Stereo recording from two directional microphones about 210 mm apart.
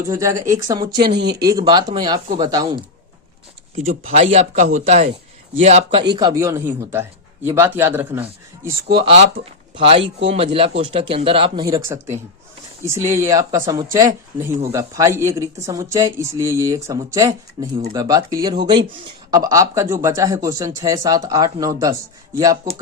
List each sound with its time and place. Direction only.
0.0 s speech: 15° right (ahead or behind)
1.1 s speech: 55° right (ahead or behind)
1.5 s speech: 15° right (ahead or behind)
4.1 s a man's voice: 35° right (ahead or behind); by 8.3 s 10° right (ahead or behind)
8.9 s speech: 25° right (ahead or behind)